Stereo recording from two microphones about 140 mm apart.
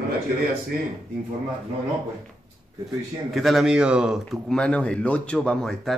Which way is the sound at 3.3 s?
Centre (ahead or behind).